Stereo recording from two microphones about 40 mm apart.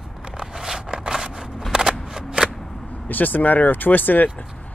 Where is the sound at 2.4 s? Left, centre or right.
Right.